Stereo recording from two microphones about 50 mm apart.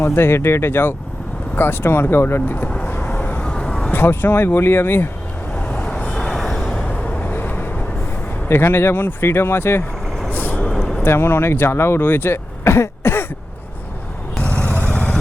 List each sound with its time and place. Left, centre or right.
0.0 s speech: left
2.8 s vehicle: left
3.5 s a sound: centre
3.9 s speech: left
5.5 s vehicle: left
6.1 s vehicle: centre
7.2 s vehicle: left
8.4 s speech: left
10.2 s vehicle: left
10.6 s vehicle: centre
11.0 s speech: left
14.3 s vehicle: left